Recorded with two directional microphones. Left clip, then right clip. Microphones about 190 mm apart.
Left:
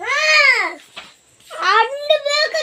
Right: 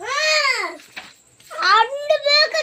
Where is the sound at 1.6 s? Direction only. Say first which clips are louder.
Even; 45° left (ahead or behind).